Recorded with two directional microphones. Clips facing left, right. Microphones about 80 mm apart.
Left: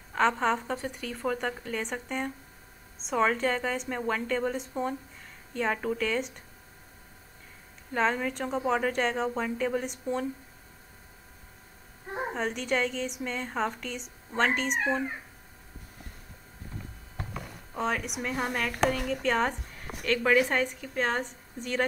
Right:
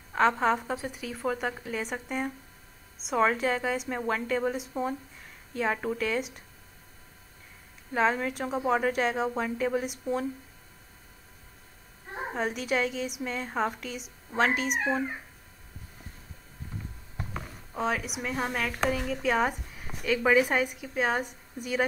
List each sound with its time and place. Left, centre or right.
0.1 s a woman's voice: centre
7.9 s a woman's voice: centre
12.4 s a woman's voice: centre
17.7 s a woman's voice: centre